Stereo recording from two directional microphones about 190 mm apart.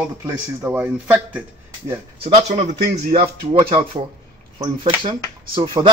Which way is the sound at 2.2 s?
35° right (ahead or behind).